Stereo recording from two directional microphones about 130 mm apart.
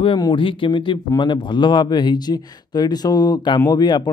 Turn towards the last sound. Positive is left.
turn(degrees=35)  # may be behind; listen again after turning